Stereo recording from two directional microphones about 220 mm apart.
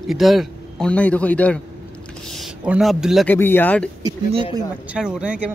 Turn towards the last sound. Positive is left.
turn(degrees=-5)  # may be behind; listen again after turning